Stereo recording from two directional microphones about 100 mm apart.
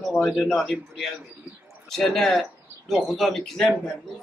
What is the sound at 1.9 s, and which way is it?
Speech, 5° left (ahead or behind).